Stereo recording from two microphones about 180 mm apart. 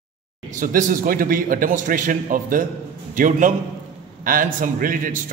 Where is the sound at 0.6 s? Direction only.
50° right (ahead or behind).